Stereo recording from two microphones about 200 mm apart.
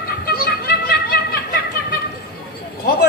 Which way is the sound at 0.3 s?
50° left (ahead or behind).